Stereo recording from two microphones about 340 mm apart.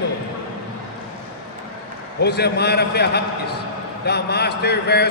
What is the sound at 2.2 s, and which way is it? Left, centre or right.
Speech, left.